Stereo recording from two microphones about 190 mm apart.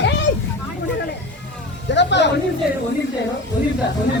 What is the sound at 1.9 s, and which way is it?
Speech, 65° left (ahead or behind).